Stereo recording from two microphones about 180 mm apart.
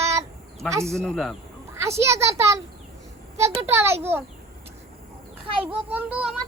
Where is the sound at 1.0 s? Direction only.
Centre (ahead or behind).